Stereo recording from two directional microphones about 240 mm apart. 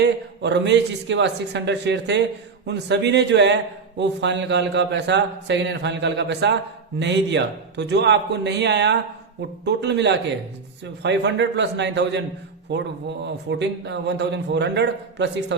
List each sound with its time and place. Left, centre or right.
0.0 s a man's voice: right